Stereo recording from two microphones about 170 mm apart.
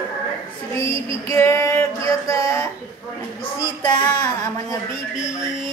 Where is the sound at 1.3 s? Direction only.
15° left (ahead or behind).